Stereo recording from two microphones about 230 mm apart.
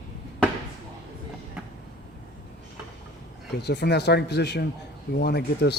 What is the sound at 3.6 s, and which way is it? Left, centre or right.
Speech, left.